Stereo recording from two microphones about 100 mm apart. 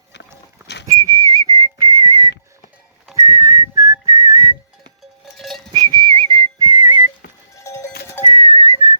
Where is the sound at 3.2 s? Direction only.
35° right (ahead or behind).